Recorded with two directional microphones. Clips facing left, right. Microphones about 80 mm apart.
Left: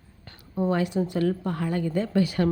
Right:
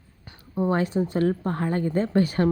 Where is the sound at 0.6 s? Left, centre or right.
Right.